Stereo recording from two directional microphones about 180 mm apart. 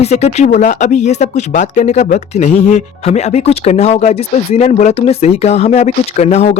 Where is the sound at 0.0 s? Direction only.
40° left (ahead or behind).